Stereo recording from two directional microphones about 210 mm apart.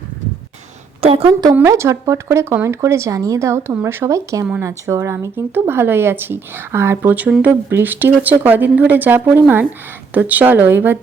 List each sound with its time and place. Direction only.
1.2 s speech: 15° right (ahead or behind)